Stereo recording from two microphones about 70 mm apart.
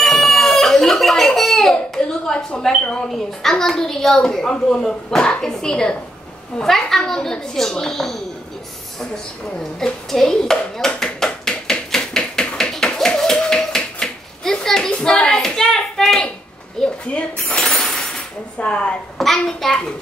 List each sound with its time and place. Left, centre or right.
0.0 s a sound: centre
3.1 s a woman's voice: centre
9.1 s a sound: centre
15.3 s hands: centre
16.8 s dishes: centre
18.6 s a woman's voice: centre
19.1 s a child's voice: centre